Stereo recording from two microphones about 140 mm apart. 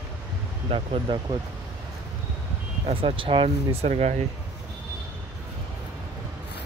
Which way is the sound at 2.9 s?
40° right (ahead or behind).